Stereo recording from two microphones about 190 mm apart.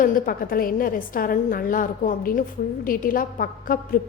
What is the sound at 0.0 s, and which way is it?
A woman's voice, 50° left (ahead or behind).